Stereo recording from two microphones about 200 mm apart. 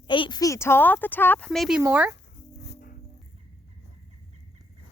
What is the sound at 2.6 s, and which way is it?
Music, 55° left (ahead or behind).